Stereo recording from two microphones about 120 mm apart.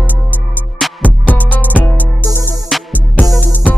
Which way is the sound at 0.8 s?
Centre (ahead or behind).